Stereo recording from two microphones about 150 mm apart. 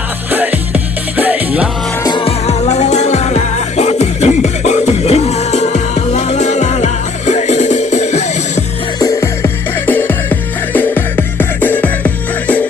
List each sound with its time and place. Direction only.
0.3 s music: 10° right (ahead or behind)
2.0 s music: 35° left (ahead or behind)
9.0 s music: 20° left (ahead or behind)